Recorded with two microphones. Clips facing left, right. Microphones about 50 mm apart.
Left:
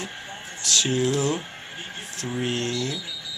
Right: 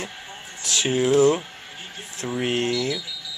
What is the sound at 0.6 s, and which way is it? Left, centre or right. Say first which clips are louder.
Speech: right 1 dB; centre.